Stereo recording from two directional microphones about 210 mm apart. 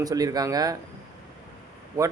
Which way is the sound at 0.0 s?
15° right (ahead or behind).